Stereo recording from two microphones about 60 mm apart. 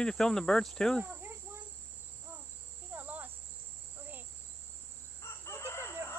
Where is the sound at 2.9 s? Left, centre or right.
Right.